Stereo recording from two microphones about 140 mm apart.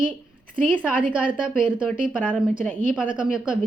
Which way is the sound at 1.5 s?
5° right (ahead or behind).